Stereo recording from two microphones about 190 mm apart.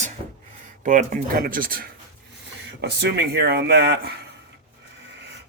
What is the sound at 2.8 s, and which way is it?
Speech, 60° right (ahead or behind).